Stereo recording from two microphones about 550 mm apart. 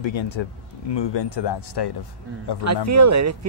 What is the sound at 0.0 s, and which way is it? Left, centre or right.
Speech, left.